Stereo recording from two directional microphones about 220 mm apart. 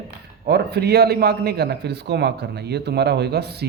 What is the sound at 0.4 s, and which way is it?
A man's voice, 50° right (ahead or behind).